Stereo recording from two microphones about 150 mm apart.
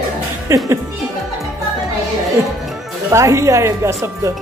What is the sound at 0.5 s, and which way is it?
Speech, 20° right (ahead or behind).